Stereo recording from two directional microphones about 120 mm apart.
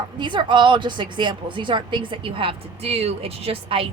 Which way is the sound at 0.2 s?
40° right (ahead or behind).